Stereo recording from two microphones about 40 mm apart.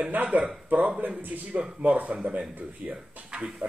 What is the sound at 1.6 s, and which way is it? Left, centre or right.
Speech, right.